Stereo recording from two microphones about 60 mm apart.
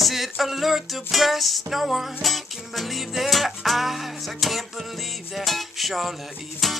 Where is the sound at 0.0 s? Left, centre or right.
Centre.